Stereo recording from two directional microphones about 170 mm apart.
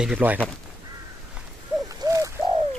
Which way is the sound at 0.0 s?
5° right (ahead or behind).